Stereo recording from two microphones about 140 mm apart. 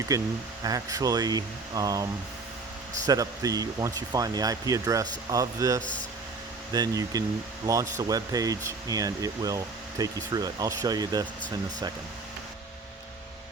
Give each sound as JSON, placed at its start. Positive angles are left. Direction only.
{"t": 0.1, "sound": "speech", "side_deg": -25}
{"t": 3.1, "sound": "speech", "side_deg": -25}